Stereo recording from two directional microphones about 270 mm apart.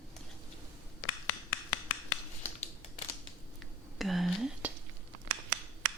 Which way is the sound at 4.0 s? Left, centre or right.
Centre.